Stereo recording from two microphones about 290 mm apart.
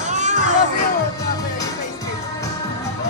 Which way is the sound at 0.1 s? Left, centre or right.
Right.